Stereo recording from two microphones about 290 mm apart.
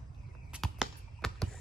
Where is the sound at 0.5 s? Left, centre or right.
Centre.